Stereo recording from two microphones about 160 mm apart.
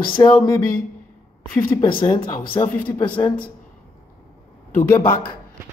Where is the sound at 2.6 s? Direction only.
25° left (ahead or behind).